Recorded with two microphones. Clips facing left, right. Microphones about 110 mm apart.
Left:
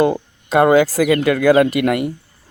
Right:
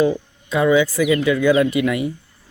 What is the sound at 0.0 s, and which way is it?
Speech, 65° left (ahead or behind).